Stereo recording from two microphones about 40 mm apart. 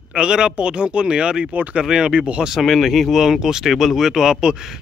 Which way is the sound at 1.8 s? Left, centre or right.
Right.